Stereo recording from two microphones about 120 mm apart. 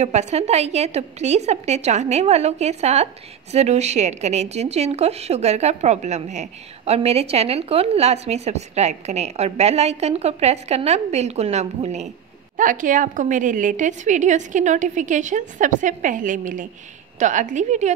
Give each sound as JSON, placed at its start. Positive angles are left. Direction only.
{"t": 0.0, "sound": "speech", "side_deg": -65}
{"t": 12.5, "sound": "a woman's voice", "side_deg": -90}